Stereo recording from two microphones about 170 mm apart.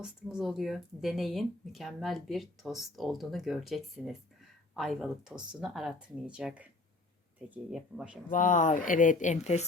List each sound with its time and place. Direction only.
0.0 s speech: 5° right (ahead or behind)
8.3 s speech: 50° left (ahead or behind)